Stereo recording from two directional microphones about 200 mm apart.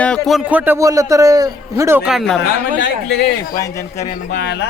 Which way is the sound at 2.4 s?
60° left (ahead or behind).